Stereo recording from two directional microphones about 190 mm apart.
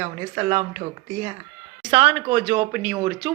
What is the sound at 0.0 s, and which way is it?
Speech, 35° right (ahead or behind).